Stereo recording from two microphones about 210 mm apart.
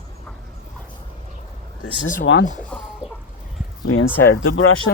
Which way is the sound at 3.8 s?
80° left.